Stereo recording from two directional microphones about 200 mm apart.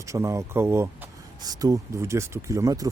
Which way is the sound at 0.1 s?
15° right (ahead or behind).